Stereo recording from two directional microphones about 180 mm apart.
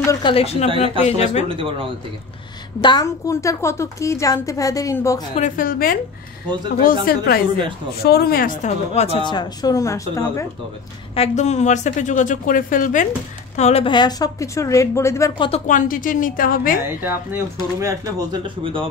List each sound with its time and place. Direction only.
0.0 s speech: 20° left (ahead or behind)
0.3 s speech: 35° left (ahead or behind)
1.5 s speech: 30° right (ahead or behind)
2.8 s a woman's voice: 25° left (ahead or behind)
5.3 s speech: 45° left (ahead or behind)
7.1 s a woman's voice: 55° left (ahead or behind); by 10.4 s 15° left (ahead or behind)
11.1 s speech: 40° left (ahead or behind)
13.6 s a woman's voice: 35° left (ahead or behind)
15.6 s speech: 45° left (ahead or behind)
17.0 s speech: 10° right (ahead or behind); by 18.9 s 30° right (ahead or behind)